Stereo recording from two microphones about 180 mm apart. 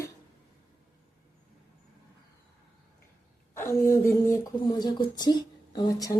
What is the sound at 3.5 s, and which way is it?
Speech, 15° left (ahead or behind).